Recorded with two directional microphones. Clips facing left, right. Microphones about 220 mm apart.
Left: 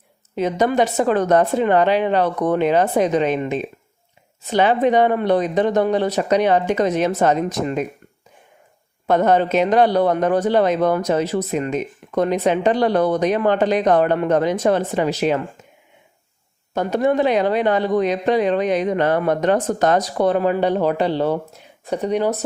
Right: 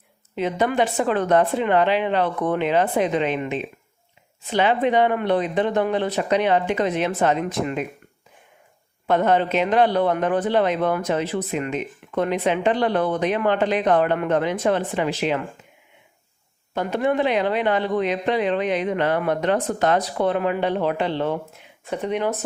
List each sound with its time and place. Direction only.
0.3 s a man's voice: 40° left (ahead or behind)
9.0 s a man's voice: 45° left (ahead or behind)
16.7 s a man's voice: 40° left (ahead or behind)